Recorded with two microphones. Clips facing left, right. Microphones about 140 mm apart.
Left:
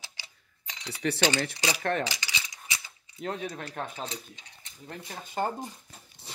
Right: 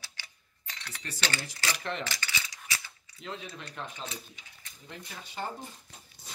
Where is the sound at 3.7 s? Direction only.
35° left (ahead or behind).